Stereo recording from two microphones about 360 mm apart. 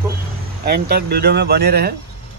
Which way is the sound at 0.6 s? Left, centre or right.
Right.